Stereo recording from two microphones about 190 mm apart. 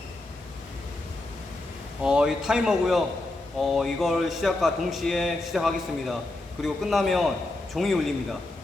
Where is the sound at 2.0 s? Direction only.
5° right (ahead or behind).